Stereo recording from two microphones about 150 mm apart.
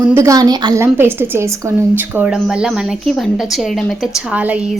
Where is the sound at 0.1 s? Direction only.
20° right (ahead or behind).